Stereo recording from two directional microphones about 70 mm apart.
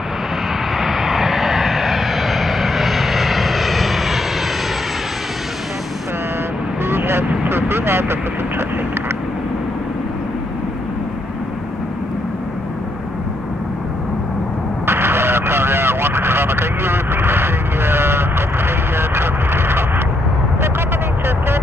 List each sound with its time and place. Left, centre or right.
0.7 s vehicle: centre
6.8 s vehicle: right
14.9 s vehicle: right